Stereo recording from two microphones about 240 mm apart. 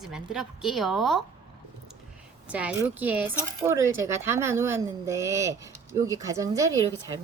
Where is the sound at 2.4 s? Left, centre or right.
Centre.